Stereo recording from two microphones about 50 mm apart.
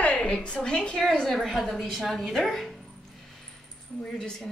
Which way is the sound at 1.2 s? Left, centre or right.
Centre.